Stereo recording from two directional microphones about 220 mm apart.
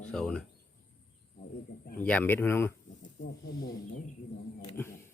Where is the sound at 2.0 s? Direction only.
5° left (ahead or behind).